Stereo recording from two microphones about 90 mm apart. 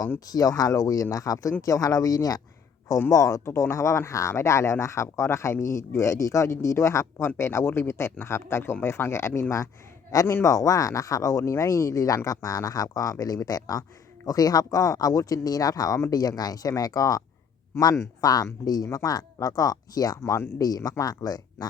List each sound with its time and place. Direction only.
0.3 s speech: 45° left (ahead or behind)
20.6 s speech: 45° left (ahead or behind)